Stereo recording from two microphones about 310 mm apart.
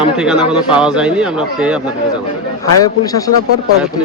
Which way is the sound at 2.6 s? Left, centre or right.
Centre.